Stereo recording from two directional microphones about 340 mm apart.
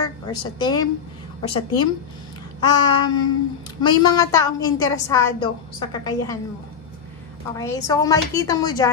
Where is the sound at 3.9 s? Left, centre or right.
Centre.